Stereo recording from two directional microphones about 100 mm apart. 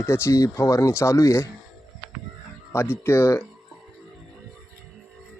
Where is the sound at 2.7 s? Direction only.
25° left (ahead or behind).